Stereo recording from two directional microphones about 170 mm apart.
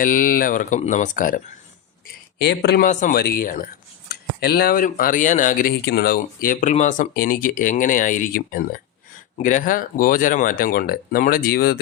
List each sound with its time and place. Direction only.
0.0 s speech: 55° left (ahead or behind)
2.4 s speech: 80° left
2.8 s speech: 50° left (ahead or behind)
4.1 s speech: 65° left (ahead or behind); by 5.7 s 50° left (ahead or behind)
5.8 s speech: 70° left (ahead or behind)